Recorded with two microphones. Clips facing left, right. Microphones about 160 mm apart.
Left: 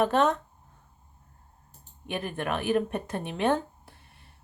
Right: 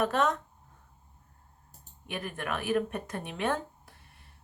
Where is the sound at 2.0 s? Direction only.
30° left (ahead or behind).